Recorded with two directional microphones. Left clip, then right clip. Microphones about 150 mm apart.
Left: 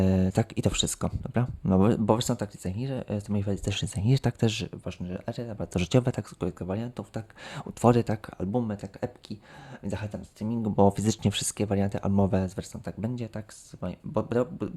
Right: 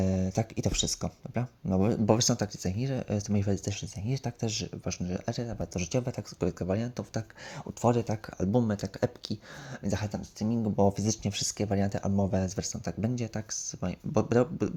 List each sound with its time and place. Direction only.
0.0 s speech: 30° left (ahead or behind)
2.0 s speech: 5° left (ahead or behind)
3.7 s speech: 40° left (ahead or behind)
4.9 s speech: 5° right (ahead or behind)
5.7 s speech: 40° left (ahead or behind)
6.4 s speech: centre (ahead or behind)
7.7 s speech: 30° left (ahead or behind)
8.5 s speech: 15° right (ahead or behind)
10.8 s speech: 25° left (ahead or behind)
12.1 s speech: 35° left (ahead or behind)
12.5 s speech: centre (ahead or behind)